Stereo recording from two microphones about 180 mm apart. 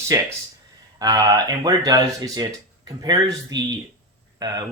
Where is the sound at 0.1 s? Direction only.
20° right (ahead or behind).